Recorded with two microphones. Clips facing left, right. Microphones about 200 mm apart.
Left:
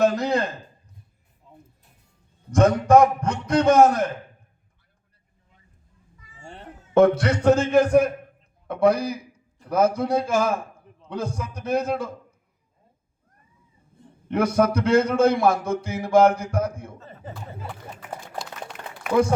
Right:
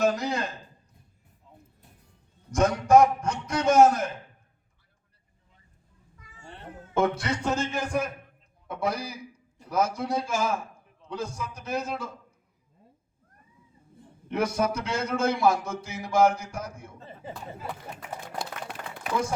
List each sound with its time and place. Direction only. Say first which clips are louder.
0.2 s a sound: left 7 dB; 55° left (ahead or behind)
2.5 s a man's voice: left 4 dB; 60° left (ahead or behind)
6.9 s a man's voice: left 9 dB; 60° left (ahead or behind)
14.3 s a man's voice: left 6 dB; 55° left (ahead or behind)
19.1 s speech: left 9 dB; 30° right (ahead or behind)